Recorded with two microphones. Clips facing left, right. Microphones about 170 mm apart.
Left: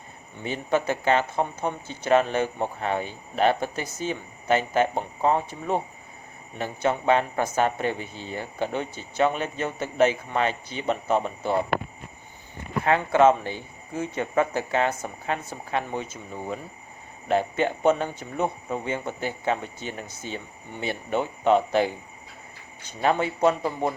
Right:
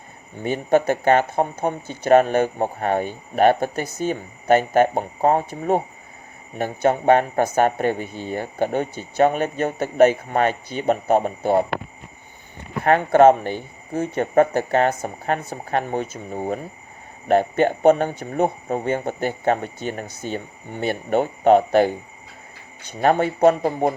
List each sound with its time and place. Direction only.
0.3 s speech: 50° right (ahead or behind)
12.8 s speech: 50° right (ahead or behind)
14.9 s speech: 40° right (ahead or behind)